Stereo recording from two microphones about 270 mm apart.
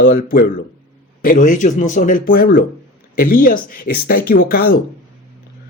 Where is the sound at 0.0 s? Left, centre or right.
Left.